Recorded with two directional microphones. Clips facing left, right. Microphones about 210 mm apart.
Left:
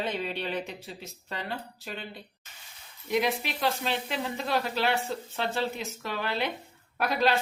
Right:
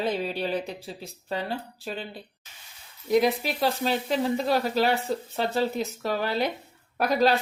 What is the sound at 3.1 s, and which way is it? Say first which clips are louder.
Speech: right 6 dB; 40° right (ahead or behind).